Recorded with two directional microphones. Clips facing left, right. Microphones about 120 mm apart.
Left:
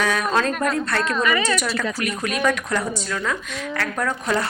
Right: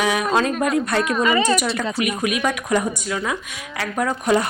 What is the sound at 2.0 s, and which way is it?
Speech, 10° right (ahead or behind).